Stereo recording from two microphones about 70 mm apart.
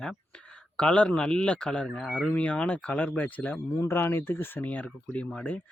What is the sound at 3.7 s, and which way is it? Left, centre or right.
Speech, left.